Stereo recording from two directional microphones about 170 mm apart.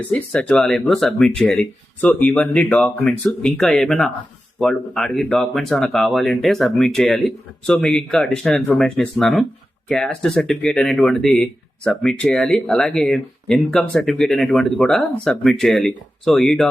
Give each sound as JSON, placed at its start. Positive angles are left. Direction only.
{"t": 0.1, "sound": "speech", "side_deg": 5}